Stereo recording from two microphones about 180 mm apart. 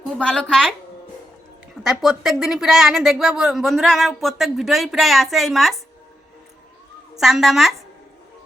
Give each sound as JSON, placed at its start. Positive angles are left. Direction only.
{"t": 0.2, "sound": "a woman's voice", "side_deg": 5}
{"t": 1.8, "sound": "a woman's voice", "side_deg": 0}
{"t": 7.2, "sound": "a woman's voice", "side_deg": 0}